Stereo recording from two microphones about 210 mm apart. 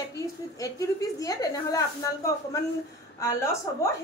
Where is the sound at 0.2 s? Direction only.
15° left (ahead or behind).